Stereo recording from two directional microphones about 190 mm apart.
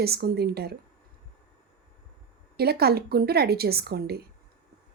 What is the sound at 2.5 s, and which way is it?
A woman's voice, 55° right (ahead or behind).